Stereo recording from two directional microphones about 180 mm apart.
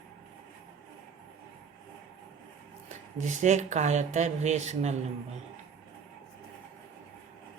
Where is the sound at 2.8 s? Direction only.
40° right (ahead or behind).